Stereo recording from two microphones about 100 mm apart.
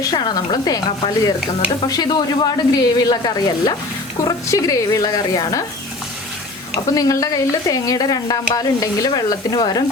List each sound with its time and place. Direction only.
0.1 s speech: 45° left (ahead or behind)
0.9 s speech: 50° left (ahead or behind)
6.9 s speech: 35° left (ahead or behind)